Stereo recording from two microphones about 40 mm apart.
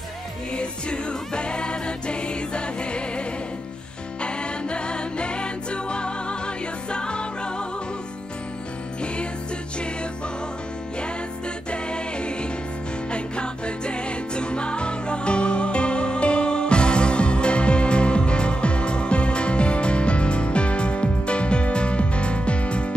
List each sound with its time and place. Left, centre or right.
0.6 s music: left
9.0 s music: left
11.7 s music: left